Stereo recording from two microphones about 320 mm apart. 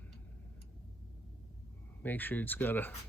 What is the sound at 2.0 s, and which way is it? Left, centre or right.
Speech, centre.